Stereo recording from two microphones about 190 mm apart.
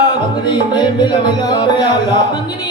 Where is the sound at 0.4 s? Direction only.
20° left (ahead or behind).